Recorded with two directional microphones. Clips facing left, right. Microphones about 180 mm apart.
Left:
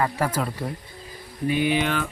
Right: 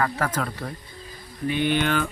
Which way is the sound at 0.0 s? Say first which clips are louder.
Left 1 dB; 10° left (ahead or behind).